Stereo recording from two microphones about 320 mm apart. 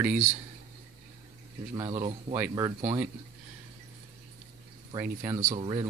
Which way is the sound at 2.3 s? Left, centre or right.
Centre.